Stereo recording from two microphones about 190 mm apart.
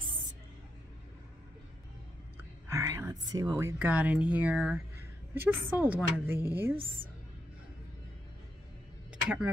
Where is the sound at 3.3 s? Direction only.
20° right (ahead or behind).